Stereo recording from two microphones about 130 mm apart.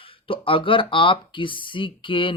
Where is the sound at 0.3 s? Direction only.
45° left (ahead or behind).